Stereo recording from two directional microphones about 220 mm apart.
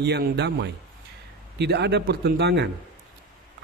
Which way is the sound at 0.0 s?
50° right (ahead or behind).